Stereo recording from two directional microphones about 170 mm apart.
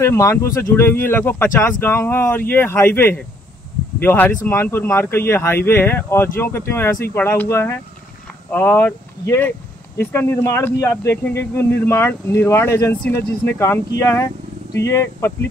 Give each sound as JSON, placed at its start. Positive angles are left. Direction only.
{"t": 0.0, "sound": "speech", "side_deg": 15}